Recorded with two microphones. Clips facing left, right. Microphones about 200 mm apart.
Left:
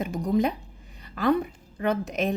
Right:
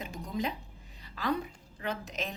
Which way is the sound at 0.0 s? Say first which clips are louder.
Left 11 dB; 65° left (ahead or behind).